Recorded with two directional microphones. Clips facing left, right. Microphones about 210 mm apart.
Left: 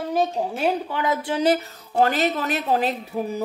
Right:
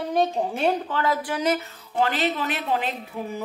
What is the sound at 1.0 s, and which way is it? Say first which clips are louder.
A woman's voice: left 4 dB; 20° left (ahead or behind).